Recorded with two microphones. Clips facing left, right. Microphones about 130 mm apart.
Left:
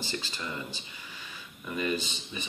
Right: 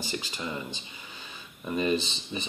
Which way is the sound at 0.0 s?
15° right (ahead or behind).